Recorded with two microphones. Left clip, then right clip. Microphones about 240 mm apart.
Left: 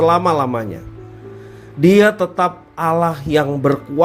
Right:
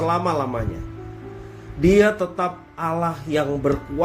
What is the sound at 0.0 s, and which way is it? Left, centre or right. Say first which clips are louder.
Speech: left 8 dB; left.